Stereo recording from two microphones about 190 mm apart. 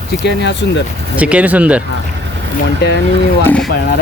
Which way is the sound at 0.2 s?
65° left (ahead or behind).